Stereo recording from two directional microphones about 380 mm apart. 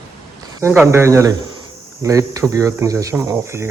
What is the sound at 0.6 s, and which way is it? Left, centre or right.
Speech, centre.